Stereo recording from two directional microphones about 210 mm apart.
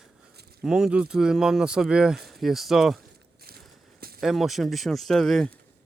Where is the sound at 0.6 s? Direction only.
5° right (ahead or behind).